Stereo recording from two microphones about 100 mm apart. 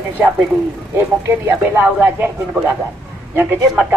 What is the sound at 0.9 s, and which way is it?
Speech, 25° right (ahead or behind).